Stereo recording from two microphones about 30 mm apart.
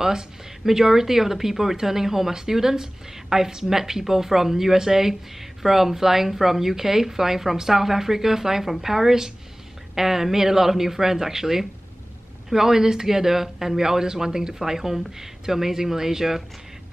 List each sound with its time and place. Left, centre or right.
0.0 s speech: right